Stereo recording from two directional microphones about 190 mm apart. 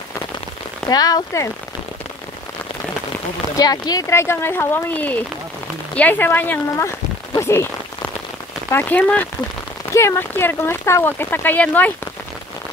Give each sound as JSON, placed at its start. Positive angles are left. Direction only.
{"t": 0.8, "sound": "speech", "side_deg": 20}
{"t": 3.5, "sound": "speech", "side_deg": 20}
{"t": 7.3, "sound": "rain on surface", "side_deg": 15}
{"t": 8.7, "sound": "speech", "side_deg": 10}